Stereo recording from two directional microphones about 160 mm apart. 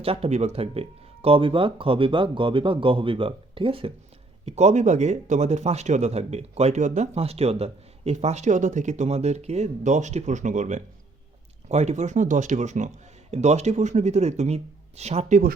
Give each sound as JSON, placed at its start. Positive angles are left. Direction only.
{"t": 0.0, "sound": "speech", "side_deg": -35}